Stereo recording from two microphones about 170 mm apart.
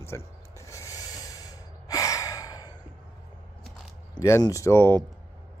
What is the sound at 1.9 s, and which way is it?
Gasp, 20° left (ahead or behind).